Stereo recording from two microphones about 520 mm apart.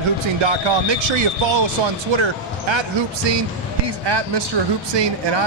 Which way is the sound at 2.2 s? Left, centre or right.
Right.